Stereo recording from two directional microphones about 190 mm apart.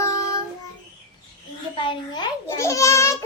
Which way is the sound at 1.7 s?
25° left (ahead or behind).